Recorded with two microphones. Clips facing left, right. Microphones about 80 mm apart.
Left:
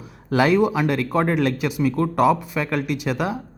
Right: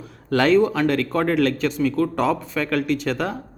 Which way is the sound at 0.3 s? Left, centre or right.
Centre.